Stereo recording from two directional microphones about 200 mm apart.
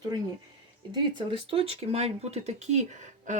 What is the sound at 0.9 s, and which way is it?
A woman's voice, 25° right (ahead or behind).